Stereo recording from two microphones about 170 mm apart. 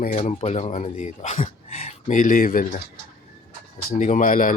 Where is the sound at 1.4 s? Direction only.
40° left (ahead or behind).